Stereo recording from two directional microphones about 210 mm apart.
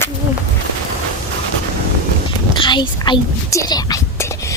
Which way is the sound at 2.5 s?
20° left (ahead or behind).